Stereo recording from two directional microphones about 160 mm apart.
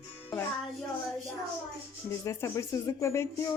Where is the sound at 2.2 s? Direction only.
20° left (ahead or behind).